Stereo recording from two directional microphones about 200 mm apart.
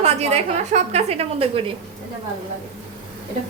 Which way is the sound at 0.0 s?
30° right (ahead or behind).